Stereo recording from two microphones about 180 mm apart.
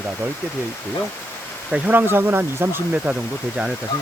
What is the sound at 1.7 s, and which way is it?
Speech, 10° right (ahead or behind).